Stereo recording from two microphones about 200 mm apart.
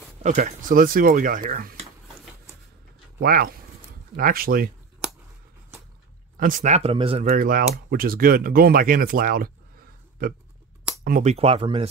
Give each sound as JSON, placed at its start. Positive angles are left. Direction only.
{"t": 0.2, "sound": "speech", "side_deg": -35}
{"t": 3.2, "sound": "speech", "side_deg": -50}
{"t": 6.3, "sound": "speech", "side_deg": -45}
{"t": 11.3, "sound": "speech", "side_deg": -30}